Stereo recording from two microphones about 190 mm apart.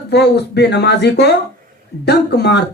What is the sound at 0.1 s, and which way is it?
Speech, 60° left (ahead or behind).